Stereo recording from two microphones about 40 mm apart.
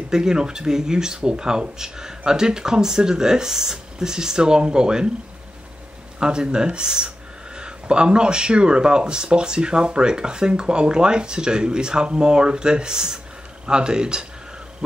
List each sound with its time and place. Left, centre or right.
0.1 s speech: centre
6.1 s speech: right